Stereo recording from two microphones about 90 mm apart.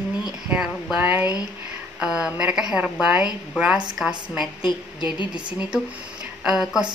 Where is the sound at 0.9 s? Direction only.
20° right (ahead or behind).